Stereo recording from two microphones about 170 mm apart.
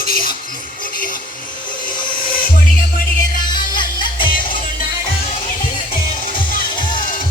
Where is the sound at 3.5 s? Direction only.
25° left (ahead or behind).